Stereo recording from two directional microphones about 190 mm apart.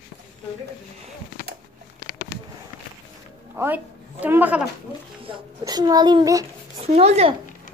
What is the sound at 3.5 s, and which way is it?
A woman's voice, 10° right (ahead or behind).